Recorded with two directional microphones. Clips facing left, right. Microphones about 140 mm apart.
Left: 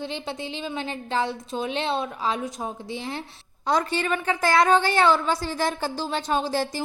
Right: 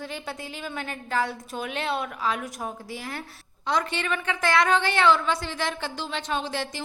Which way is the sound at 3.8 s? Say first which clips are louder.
Left 3 dB; 35° left (ahead or behind).